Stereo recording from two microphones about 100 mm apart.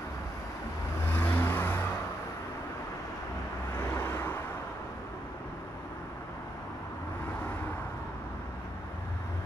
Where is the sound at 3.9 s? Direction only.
25° left (ahead or behind).